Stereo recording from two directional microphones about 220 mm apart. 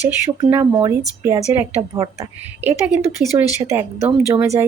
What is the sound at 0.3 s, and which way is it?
A woman's voice, 15° right (ahead or behind).